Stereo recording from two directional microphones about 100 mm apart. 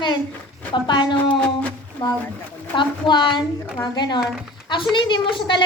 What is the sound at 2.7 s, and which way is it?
A woman's voice, 50° left (ahead or behind).